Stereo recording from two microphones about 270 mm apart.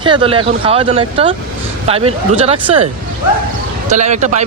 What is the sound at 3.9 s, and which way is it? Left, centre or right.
Speech, right.